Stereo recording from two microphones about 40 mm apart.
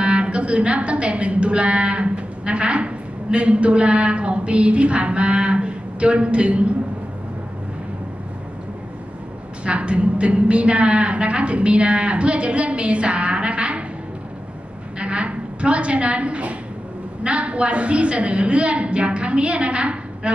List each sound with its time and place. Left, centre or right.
0.0 s a woman's voice: right
9.7 s a woman's voice: right
15.0 s a woman's voice: right